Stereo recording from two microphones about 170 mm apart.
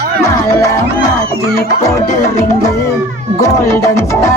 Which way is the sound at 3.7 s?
15° left (ahead or behind).